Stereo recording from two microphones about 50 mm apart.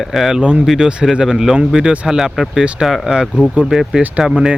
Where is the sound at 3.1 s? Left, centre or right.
Right.